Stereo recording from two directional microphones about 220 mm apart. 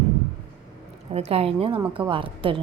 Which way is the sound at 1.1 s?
25° right (ahead or behind).